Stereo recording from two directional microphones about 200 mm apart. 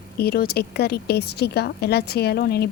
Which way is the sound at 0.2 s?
50° left (ahead or behind).